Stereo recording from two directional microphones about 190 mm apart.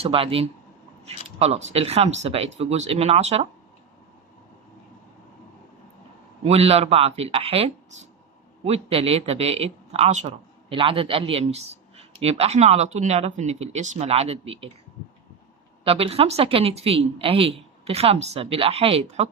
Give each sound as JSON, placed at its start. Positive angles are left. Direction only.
{"t": 0.0, "sound": "speech", "side_deg": -30}
{"t": 6.4, "sound": "speech", "side_deg": -30}
{"t": 15.8, "sound": "speech", "side_deg": -30}